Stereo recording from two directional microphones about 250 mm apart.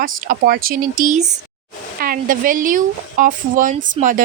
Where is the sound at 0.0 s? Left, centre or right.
Right.